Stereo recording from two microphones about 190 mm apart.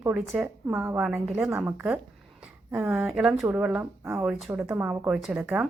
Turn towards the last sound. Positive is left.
turn(degrees=-10)  # may be behind; listen again after turning